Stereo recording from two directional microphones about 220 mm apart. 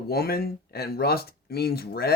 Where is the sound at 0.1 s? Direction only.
45° left (ahead or behind).